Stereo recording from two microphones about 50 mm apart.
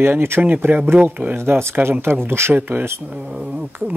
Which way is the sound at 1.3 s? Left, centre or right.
Right.